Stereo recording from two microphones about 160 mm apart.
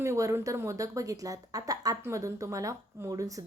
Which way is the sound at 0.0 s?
20° right (ahead or behind).